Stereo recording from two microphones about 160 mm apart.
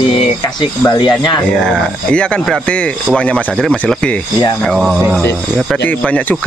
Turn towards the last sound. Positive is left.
turn(degrees=10)  # may be behind; listen again after turning